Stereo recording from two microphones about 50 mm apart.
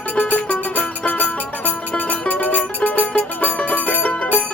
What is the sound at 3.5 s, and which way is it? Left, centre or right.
Music, left.